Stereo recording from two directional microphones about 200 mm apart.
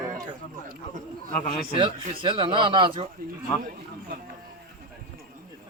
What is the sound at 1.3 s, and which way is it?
Speech, 35° left (ahead or behind).